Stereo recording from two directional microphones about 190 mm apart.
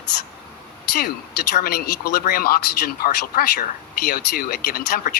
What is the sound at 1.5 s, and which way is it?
Speech, 50° left (ahead or behind).